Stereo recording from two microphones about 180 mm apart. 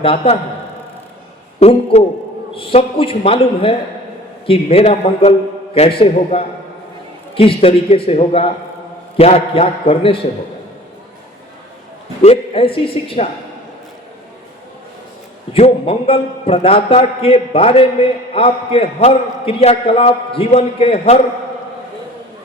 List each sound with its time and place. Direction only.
0.0 s a man's voice: 30° left (ahead or behind)
1.5 s a man's voice: 35° left (ahead or behind)
12.2 s a man's voice: 35° left (ahead or behind)
15.5 s a man's voice: 35° left (ahead or behind)